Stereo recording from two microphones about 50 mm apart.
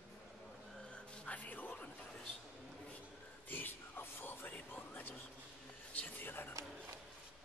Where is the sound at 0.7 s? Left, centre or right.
Centre.